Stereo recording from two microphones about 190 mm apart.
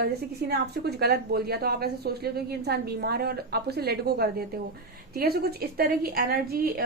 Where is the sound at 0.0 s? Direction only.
55° right (ahead or behind).